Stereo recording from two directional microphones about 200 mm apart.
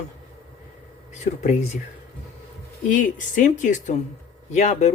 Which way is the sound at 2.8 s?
40° left (ahead or behind).